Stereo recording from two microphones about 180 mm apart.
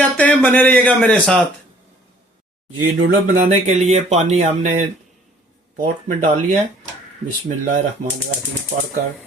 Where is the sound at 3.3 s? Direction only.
40° right (ahead or behind).